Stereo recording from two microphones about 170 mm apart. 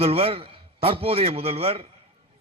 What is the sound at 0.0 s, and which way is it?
A man's voice, 35° right (ahead or behind).